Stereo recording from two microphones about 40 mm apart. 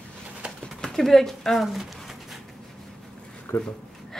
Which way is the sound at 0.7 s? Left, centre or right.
Centre.